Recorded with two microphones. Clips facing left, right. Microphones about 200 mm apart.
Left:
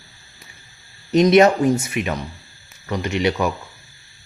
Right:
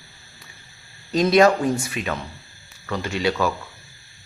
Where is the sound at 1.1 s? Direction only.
20° left (ahead or behind).